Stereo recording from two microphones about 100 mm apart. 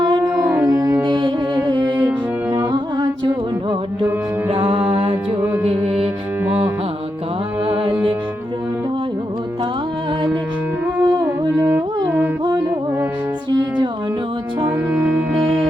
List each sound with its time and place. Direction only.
0.3 s music: 15° right (ahead or behind)
0.7 s music: 30° right (ahead or behind)
1.0 s music: 50° right (ahead or behind)
4.5 s music: 60° right (ahead or behind)
6.4 s music: 15° right (ahead or behind)
10.9 s music: 20° right (ahead or behind)
14.6 s music: 20° right (ahead or behind)